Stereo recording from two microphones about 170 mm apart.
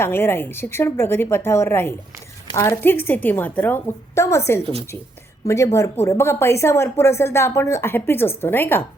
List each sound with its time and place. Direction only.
0.0 s speech: 15° left (ahead or behind)